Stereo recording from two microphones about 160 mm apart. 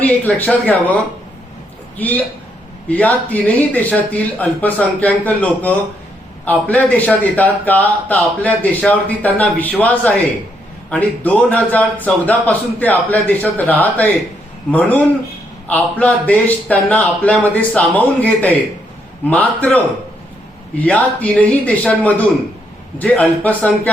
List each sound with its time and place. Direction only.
0.0 s a man's voice: 10° left (ahead or behind)
2.0 s a man's voice: 10° left (ahead or behind)